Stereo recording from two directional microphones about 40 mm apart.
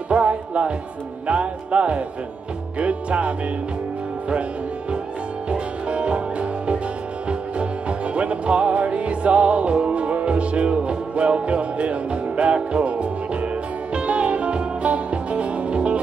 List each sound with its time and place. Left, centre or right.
0.1 s music: right
5.5 s music: right